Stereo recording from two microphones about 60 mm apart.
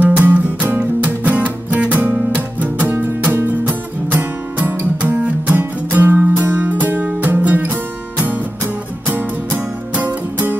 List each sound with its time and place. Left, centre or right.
0.0 s music: right
9.9 s music: right